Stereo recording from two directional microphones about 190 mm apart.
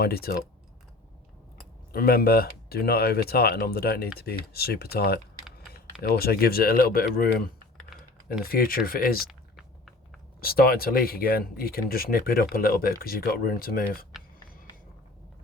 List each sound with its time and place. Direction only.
0.0 s speech: 55° left (ahead or behind)
1.9 s speech: 50° left (ahead or behind)
9.6 s a sound: centre (ahead or behind)
10.4 s speech: 50° left (ahead or behind)